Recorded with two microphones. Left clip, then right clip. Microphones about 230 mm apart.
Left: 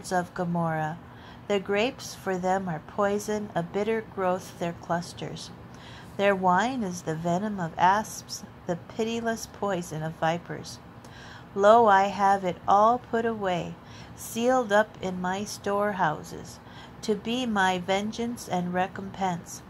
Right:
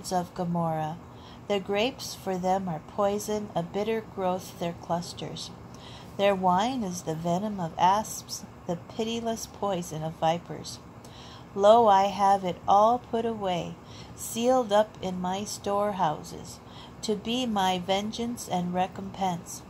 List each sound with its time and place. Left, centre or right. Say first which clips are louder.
0.0 s a woman's voice: left 1 dB; left